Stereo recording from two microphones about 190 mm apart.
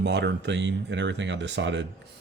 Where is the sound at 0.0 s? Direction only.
65° right (ahead or behind).